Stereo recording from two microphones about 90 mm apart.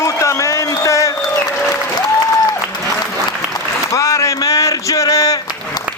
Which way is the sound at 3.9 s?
35° left (ahead or behind).